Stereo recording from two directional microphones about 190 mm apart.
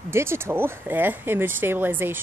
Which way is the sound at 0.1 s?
15° right (ahead or behind).